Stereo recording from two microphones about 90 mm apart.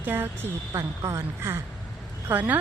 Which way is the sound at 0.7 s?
40° right (ahead or behind).